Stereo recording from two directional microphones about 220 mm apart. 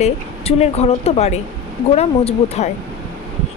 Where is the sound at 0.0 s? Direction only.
30° left (ahead or behind).